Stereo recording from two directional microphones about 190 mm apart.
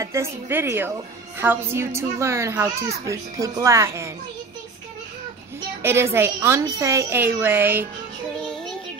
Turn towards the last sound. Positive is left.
turn(degrees=-10)  # may be behind; listen again after turning